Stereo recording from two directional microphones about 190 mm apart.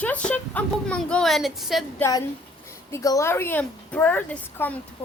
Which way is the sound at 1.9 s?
15° left (ahead or behind).